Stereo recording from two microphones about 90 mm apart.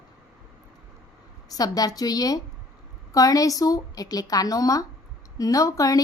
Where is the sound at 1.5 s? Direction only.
45° left (ahead or behind).